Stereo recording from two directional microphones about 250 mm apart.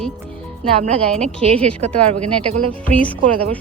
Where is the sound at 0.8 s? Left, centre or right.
Right.